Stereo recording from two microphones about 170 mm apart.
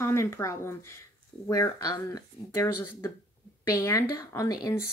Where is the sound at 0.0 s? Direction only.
15° left (ahead or behind).